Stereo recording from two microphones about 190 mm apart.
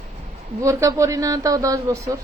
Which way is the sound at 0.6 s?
15° right (ahead or behind).